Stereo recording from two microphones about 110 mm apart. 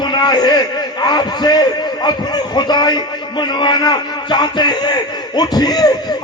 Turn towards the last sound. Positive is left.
turn(degrees=35)  # may be behind; listen again after turning